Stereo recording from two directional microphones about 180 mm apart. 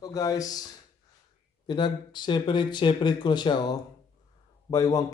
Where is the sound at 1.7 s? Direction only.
25° left (ahead or behind).